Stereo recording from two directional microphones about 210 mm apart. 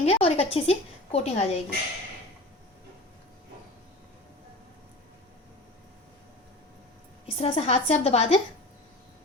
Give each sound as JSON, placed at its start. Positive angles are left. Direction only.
{"t": 0.0, "sound": "a woman's voice", "side_deg": 30}
{"t": 7.3, "sound": "a woman's voice", "side_deg": 30}